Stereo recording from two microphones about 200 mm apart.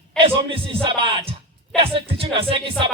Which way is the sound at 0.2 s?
25° right (ahead or behind).